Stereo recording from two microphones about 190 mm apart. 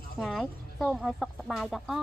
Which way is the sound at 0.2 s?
Centre (ahead or behind).